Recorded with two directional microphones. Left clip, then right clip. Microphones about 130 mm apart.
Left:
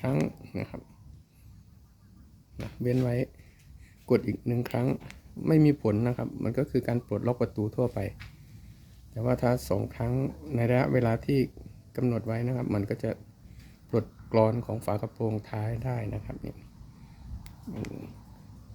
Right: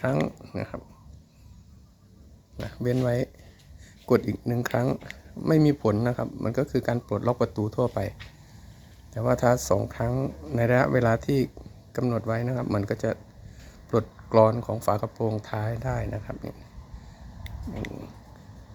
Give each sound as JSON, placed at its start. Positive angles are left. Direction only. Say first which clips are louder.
{"t": 0.0, "sound": "speech", "louder": "right 4 dB", "side_deg": 20}
{"t": 3.0, "sound": "speech", "louder": "right 4 dB", "side_deg": 10}
{"t": 9.1, "sound": "speech", "louder": "right 5 dB", "side_deg": 15}